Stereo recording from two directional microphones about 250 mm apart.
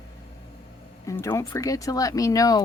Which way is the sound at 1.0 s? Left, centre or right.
Centre.